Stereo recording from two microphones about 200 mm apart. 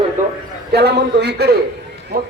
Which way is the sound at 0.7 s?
55° right (ahead or behind).